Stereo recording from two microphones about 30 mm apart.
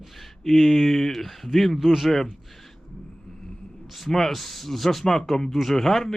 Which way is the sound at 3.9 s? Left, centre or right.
Centre.